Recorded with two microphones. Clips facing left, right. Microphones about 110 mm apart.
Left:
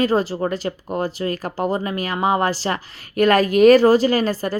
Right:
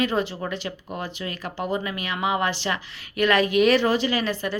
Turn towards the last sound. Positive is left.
turn(degrees=40)  # may be behind; listen again after turning